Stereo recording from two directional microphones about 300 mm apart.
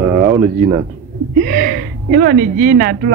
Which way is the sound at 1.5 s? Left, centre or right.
Right.